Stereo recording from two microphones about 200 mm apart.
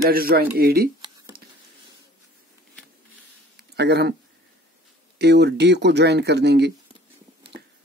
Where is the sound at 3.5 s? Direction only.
55° right (ahead or behind).